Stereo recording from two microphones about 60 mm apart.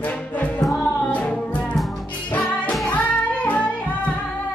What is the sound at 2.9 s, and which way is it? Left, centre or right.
Music, left.